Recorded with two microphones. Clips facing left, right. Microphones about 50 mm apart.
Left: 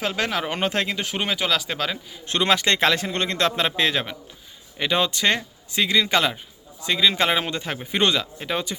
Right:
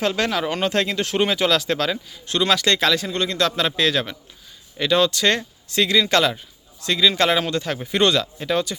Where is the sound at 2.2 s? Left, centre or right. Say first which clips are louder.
Right 1 dB; left.